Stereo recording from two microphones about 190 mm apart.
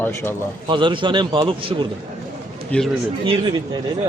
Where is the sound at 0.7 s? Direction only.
25° right (ahead or behind).